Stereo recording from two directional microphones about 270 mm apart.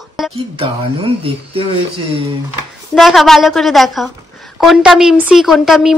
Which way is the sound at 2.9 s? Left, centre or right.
Centre.